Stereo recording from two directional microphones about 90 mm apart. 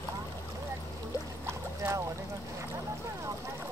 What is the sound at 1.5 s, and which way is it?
Boat, 30° right (ahead or behind).